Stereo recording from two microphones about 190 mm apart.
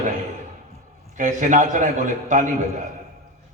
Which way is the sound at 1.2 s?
40° right (ahead or behind).